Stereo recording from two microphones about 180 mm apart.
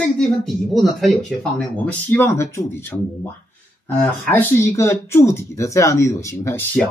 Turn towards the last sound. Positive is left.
turn(degrees=10)  # may be behind; listen again after turning